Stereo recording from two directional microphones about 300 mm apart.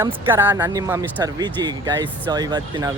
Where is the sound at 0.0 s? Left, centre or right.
Centre.